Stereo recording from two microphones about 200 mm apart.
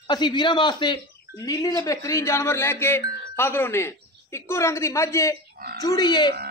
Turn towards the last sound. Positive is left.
turn(degrees=20)  # may be behind; listen again after turning